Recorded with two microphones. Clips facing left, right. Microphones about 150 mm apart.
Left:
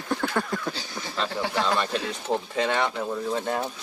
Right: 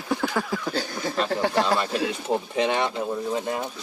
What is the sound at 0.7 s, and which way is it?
Speech, 50° right (ahead or behind).